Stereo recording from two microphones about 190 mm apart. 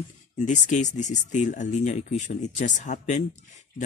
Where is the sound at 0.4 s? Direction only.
40° left (ahead or behind).